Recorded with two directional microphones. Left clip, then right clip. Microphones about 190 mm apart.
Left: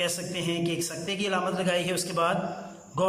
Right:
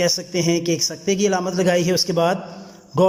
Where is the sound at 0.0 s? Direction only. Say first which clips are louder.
Right 9 dB; 35° right (ahead or behind).